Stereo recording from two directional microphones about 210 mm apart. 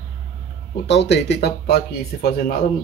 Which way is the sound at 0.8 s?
55° left (ahead or behind).